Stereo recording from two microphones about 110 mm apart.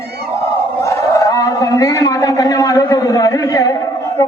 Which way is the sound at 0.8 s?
30° left (ahead or behind).